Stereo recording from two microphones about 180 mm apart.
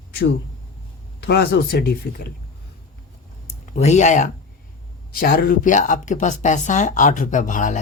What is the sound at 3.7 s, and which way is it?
Speech, 40° left (ahead or behind).